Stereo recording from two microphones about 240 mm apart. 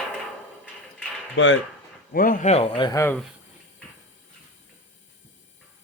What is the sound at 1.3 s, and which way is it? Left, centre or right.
Speech, left.